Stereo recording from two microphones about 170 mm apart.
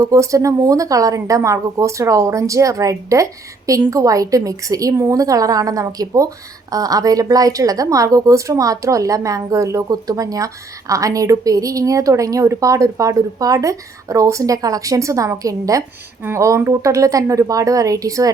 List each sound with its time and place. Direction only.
0.0 s a woman's voice: 20° right (ahead or behind)